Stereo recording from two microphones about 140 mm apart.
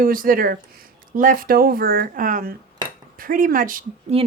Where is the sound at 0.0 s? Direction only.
90° right.